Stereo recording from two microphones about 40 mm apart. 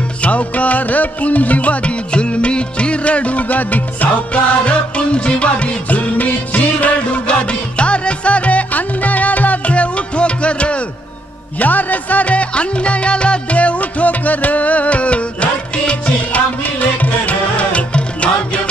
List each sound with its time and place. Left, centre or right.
0.2 s music: left
7.2 s music: left
11.6 s music: left